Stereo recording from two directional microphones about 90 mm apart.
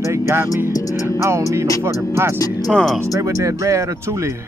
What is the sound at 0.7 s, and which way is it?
Music, 40° left (ahead or behind).